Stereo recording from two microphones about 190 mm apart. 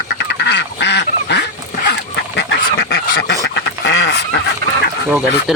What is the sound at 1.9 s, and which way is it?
Goose, 65° left (ahead or behind).